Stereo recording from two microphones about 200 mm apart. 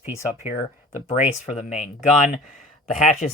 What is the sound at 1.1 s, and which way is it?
Speech, 35° left (ahead or behind).